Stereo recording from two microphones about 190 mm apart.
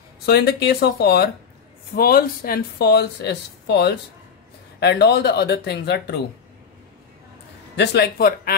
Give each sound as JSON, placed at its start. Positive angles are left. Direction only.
{"t": 0.2, "sound": "speech", "side_deg": 60}
{"t": 7.7, "sound": "speech", "side_deg": 60}